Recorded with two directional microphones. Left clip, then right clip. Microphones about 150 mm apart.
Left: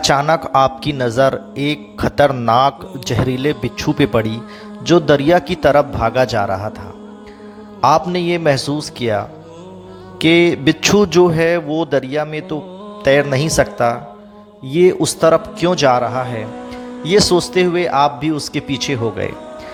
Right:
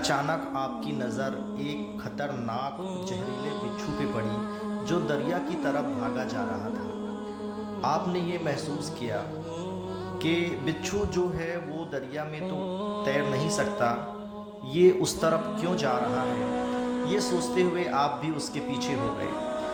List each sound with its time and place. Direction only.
0.0 s speech: 70° left (ahead or behind); by 4.3 s 90° left
4.9 s speech: 80° left
7.8 s speech: 75° left (ahead or behind)
14.7 s a man's voice: 60° left (ahead or behind)
16.5 s music: centre (ahead or behind)
17.1 s speech: 75° left (ahead or behind)